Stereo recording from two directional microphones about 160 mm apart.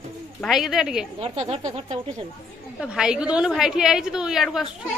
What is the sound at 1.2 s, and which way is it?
Speech, 35° right (ahead or behind).